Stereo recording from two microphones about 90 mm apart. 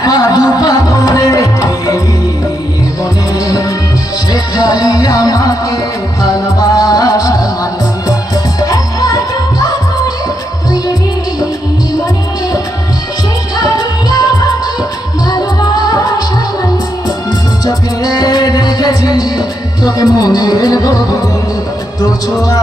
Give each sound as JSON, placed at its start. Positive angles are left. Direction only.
{"t": 0.0, "sound": "music", "side_deg": 45}
{"t": 4.3, "sound": "music", "side_deg": 45}
{"t": 8.6, "sound": "music", "side_deg": 40}
{"t": 13.6, "sound": "music", "side_deg": 50}
{"t": 15.3, "sound": "music", "side_deg": 45}
{"t": 17.7, "sound": "music", "side_deg": 45}
{"t": 22.4, "sound": "music", "side_deg": 40}